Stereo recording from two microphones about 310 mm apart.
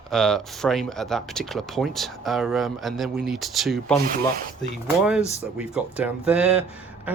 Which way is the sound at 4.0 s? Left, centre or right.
Right.